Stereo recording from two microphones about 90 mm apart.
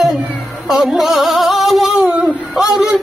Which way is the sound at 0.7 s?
Centre (ahead or behind).